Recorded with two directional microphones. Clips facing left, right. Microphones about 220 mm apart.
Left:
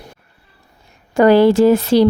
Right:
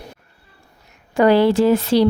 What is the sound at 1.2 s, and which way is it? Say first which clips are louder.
Speech: left 4 dB; 45° left (ahead or behind).